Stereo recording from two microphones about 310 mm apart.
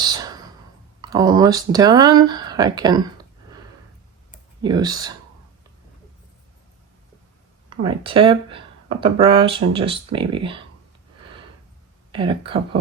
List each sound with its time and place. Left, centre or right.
0.0 s a sound: centre
1.1 s speech: centre
4.6 s speech: centre
7.7 s speech: centre
12.1 s speech: centre